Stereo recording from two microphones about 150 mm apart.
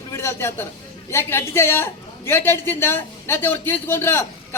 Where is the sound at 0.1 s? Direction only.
15° left (ahead or behind).